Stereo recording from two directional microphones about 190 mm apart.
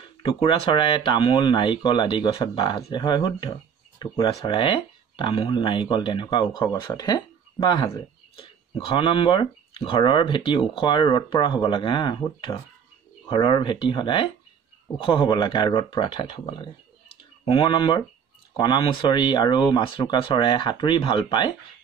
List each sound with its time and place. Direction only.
0.2 s speech: 30° left (ahead or behind)